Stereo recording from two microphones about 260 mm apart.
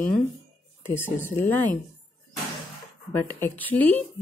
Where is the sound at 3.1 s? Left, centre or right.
Centre.